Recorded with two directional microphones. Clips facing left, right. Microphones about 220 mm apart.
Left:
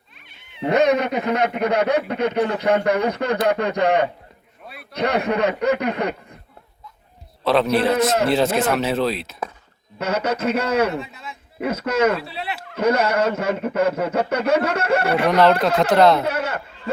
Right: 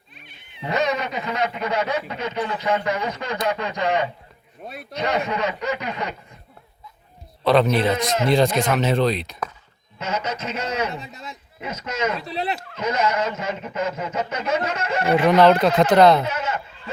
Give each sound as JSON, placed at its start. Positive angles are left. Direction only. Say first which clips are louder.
{"t": 0.6, "sound": "speech", "louder": "left 6 dB", "side_deg": 55}
{"t": 7.4, "sound": "a man's voice", "louder": "right 1 dB", "side_deg": 0}
{"t": 7.9, "sound": "speech", "louder": "left 5 dB", "side_deg": 45}
{"t": 8.3, "sound": "speech", "louder": "even", "side_deg": 5}
{"t": 10.0, "sound": "speech", "louder": "left 6 dB", "side_deg": 60}
{"t": 11.1, "sound": "speech", "louder": "right 1 dB", "side_deg": -40}
{"t": 11.6, "sound": "speech", "louder": "left 7 dB", "side_deg": 60}
{"t": 15.3, "sound": "speech", "louder": "right 1 dB", "side_deg": 0}
{"t": 16.2, "sound": "speech", "louder": "left 3 dB", "side_deg": 60}